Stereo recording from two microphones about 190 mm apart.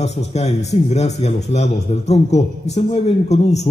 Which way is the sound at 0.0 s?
35° left (ahead or behind).